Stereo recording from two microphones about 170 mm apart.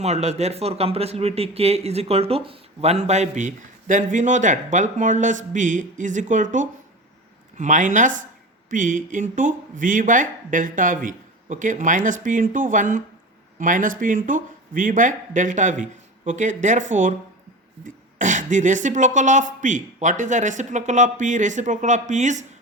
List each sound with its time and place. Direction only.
0.0 s speech: 40° right (ahead or behind)